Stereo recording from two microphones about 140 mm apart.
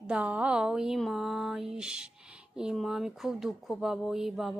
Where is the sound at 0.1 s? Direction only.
10° right (ahead or behind).